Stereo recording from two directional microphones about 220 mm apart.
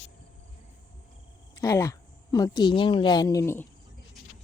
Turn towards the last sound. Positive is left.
turn(degrees=10)  # may be behind; listen again after turning